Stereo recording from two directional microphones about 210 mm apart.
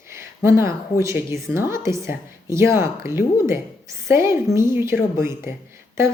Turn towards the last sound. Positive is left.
turn(degrees=-10)  # may be behind; listen again after turning